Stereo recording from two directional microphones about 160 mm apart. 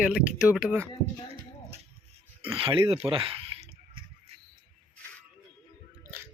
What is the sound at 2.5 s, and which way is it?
Speech, 35° right (ahead or behind).